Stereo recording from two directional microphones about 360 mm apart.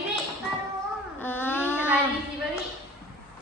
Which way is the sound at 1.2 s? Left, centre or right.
Centre.